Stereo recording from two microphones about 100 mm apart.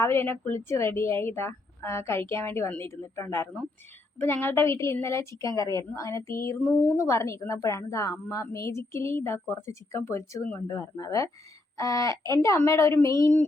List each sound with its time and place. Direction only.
0.0 s a woman's voice: 25° left (ahead or behind)